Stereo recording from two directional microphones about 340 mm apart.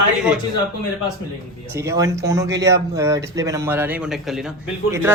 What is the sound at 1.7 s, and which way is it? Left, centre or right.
A man's voice, centre.